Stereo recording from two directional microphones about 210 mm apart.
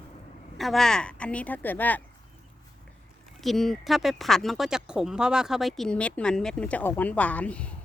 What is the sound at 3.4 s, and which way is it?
Speech, centre (ahead or behind).